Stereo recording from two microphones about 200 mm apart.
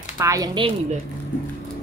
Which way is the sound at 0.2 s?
15° right (ahead or behind).